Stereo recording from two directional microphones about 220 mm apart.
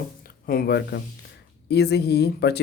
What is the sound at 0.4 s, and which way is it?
Speech, 45° left (ahead or behind).